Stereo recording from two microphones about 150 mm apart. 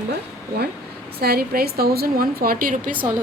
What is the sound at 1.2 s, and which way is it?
A woman's voice, 90° right.